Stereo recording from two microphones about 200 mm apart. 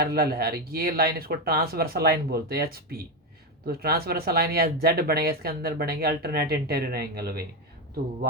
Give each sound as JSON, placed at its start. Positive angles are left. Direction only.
{"t": 0.0, "sound": "speech", "side_deg": -50}